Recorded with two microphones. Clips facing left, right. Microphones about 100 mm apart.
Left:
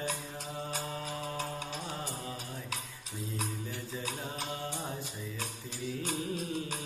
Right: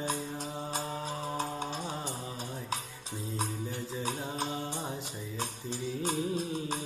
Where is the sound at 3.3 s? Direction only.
35° right (ahead or behind).